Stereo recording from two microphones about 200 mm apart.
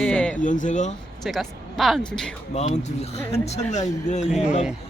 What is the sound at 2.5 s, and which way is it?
Speech, 30° left (ahead or behind).